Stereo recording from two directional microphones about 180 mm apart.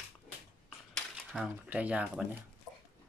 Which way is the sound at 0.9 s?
Centre (ahead or behind).